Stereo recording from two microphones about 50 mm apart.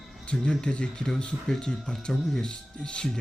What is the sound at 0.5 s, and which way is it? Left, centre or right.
Speech, centre.